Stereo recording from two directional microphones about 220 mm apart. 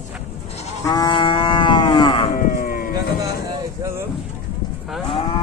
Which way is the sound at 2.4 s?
40° left (ahead or behind).